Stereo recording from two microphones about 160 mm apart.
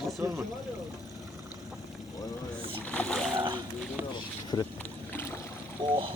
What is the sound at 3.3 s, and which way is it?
Boat, 30° right (ahead or behind).